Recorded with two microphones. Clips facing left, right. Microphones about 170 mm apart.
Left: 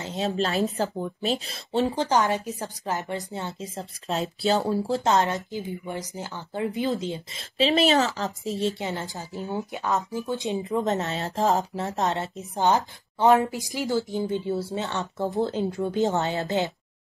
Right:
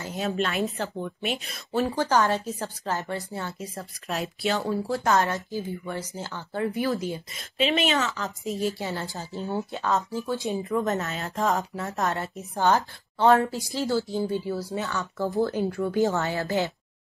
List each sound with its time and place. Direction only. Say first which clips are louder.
0.0 s a sound: left 2 dB; 20° left (ahead or behind)
0.4 s speech: left 4 dB; 35° left (ahead or behind)
1.8 s a woman's voice: even; 20° left (ahead or behind)
5.0 s a woman's voice: right 1 dB; 20° left (ahead or behind)
7.5 s a woman's voice: left 4 dB; 35° left (ahead or behind); by 11.1 s 20° left (ahead or behind)
11.3 s speech: left 2 dB; 35° left (ahead or behind)
11.8 s a woman's voice: left 2 dB; 20° left (ahead or behind)